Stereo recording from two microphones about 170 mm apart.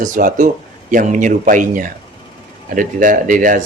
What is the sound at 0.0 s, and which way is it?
Speech, 50° right (ahead or behind).